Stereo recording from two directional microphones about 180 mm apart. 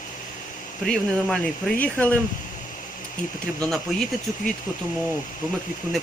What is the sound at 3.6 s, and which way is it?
Speech, centre (ahead or behind).